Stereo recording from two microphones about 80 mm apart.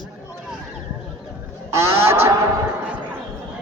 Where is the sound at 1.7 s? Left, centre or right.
Right.